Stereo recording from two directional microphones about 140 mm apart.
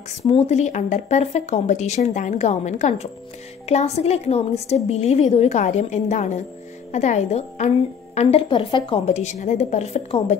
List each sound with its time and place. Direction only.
0.3 s a woman's voice: 50° left (ahead or behind)
9.0 s speech: 55° left (ahead or behind)